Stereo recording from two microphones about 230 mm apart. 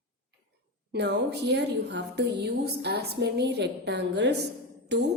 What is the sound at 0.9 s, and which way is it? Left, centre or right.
A woman's voice, right.